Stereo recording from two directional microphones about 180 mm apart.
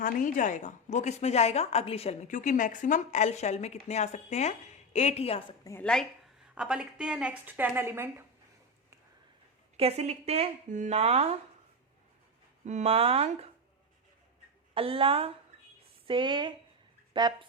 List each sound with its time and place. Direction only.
0.0 s a woman's voice: 45° left (ahead or behind)
5.8 s a woman's voice: 5° left (ahead or behind); by 8.1 s 15° right (ahead or behind)
9.7 s speech: 35° right (ahead or behind)
12.6 s speech: 40° right (ahead or behind)
14.8 s speech: 30° right (ahead or behind)